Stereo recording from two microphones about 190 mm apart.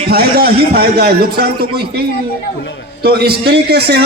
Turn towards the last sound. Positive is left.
turn(degrees=-60)  # may be behind; listen again after turning